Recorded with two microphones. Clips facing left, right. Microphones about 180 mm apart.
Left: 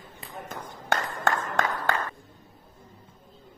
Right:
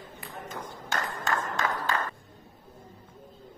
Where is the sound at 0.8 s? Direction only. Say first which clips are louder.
Left 6 dB; 60° left (ahead or behind).